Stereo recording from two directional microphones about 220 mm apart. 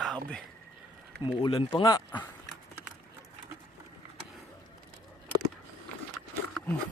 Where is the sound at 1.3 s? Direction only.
25° left (ahead or behind).